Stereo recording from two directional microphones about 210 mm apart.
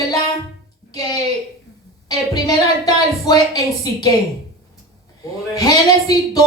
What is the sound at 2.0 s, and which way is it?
A woman's voice, 20° left (ahead or behind).